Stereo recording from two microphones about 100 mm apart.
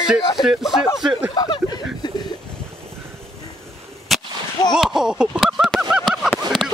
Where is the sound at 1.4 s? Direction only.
45° left (ahead or behind).